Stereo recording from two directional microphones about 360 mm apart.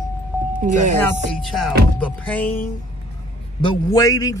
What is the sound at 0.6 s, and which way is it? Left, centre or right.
Speech, right.